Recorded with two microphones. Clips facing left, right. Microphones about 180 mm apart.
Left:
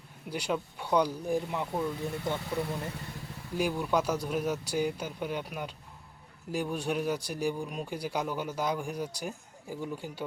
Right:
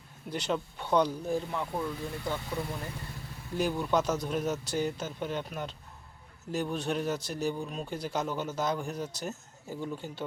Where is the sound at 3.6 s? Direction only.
10° left (ahead or behind).